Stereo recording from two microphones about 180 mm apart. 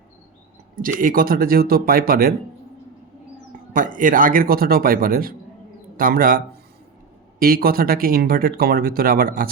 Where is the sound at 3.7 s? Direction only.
50° right (ahead or behind).